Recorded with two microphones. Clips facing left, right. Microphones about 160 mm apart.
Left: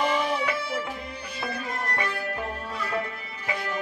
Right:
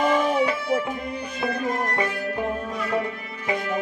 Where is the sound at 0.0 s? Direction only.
45° right (ahead or behind).